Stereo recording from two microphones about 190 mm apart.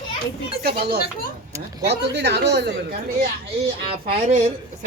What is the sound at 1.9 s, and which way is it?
Speech, 65° right (ahead or behind).